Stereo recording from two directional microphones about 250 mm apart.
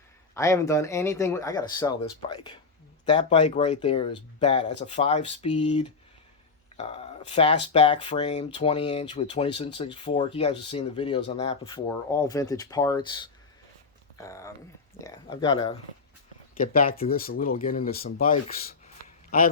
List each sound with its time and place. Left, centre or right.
0.3 s speech: centre
16.6 s speech: left